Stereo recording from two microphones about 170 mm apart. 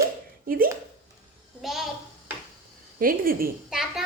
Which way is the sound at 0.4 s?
60° right (ahead or behind).